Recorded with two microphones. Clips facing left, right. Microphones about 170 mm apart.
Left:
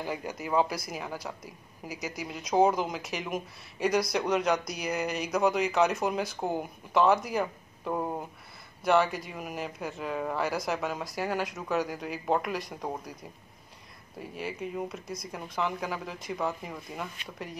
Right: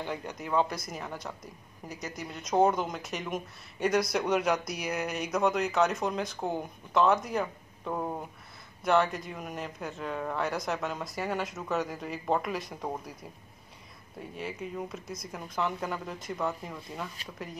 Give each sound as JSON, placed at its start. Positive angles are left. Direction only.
{"t": 0.0, "sound": "speech", "side_deg": 5}
{"t": 14.2, "sound": "speech", "side_deg": 0}